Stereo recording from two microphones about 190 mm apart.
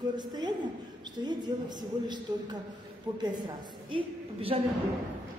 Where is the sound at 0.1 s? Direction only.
20° right (ahead or behind).